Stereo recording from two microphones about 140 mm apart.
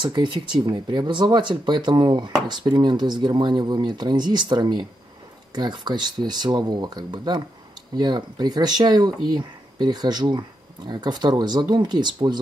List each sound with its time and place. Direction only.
0.0 s speech: 35° right (ahead or behind)